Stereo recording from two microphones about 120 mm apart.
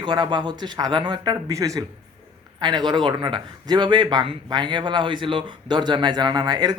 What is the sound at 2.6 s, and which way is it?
Speech, 40° right (ahead or behind).